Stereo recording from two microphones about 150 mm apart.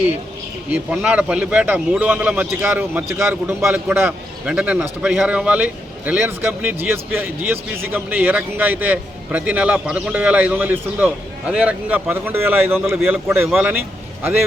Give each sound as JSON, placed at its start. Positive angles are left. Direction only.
{"t": 0.7, "sound": "a man's voice", "side_deg": -10}